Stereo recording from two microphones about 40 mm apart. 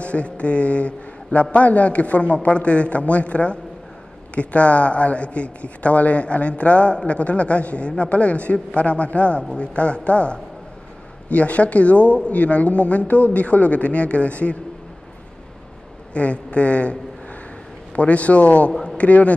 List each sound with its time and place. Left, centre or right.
0.0 s a man's voice: left
16.1 s a man's voice: left
17.9 s a man's voice: left
18.7 s a man's voice: centre
18.9 s a man's voice: left